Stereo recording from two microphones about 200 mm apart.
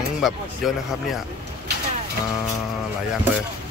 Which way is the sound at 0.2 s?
Centre (ahead or behind).